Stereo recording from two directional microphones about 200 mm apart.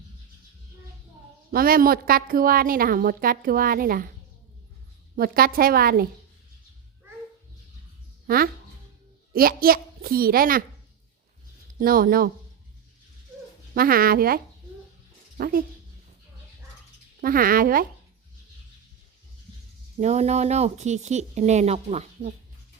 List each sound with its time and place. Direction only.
1.5 s a woman's voice: 45° right (ahead or behind)
5.1 s a woman's voice: 45° right (ahead or behind)
8.3 s a woman's voice: 45° right (ahead or behind)
11.8 s a woman's voice: 45° right (ahead or behind)
13.7 s a woman's voice: 45° right (ahead or behind)
17.2 s a woman's voice: 45° right (ahead or behind)
20.0 s speech: 35° right (ahead or behind)